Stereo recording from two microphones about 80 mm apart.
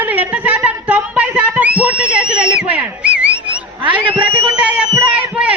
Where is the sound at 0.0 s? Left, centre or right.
Right.